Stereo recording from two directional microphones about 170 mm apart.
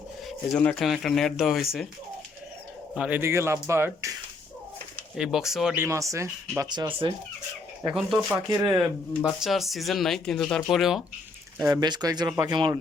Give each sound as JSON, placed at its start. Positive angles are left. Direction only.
{"t": 0.3, "sound": "speech", "side_deg": 5}
{"t": 2.9, "sound": "speech", "side_deg": -10}
{"t": 5.1, "sound": "speech", "side_deg": -5}
{"t": 5.7, "sound": "speech", "side_deg": -15}
{"t": 7.9, "sound": "speech", "side_deg": 0}
{"t": 8.4, "sound": "speech", "side_deg": -15}
{"t": 9.2, "sound": "speech", "side_deg": 0}
{"t": 11.7, "sound": "speech", "side_deg": -25}